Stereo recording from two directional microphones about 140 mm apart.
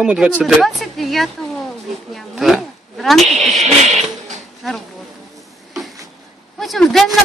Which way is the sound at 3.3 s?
50° right (ahead or behind).